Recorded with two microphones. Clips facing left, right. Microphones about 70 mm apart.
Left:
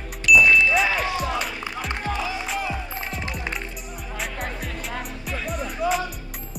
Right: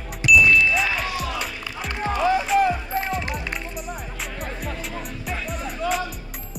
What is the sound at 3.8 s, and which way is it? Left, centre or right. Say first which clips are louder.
Music: right 4 dB; right.